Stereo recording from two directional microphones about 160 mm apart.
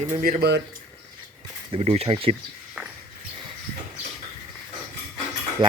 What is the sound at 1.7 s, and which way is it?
Speech, 40° right (ahead or behind).